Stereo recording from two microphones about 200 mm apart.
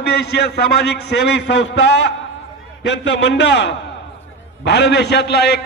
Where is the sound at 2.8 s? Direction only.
60° left (ahead or behind).